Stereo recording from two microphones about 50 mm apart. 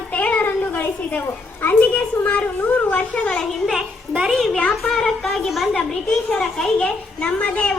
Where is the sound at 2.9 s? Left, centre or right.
Left.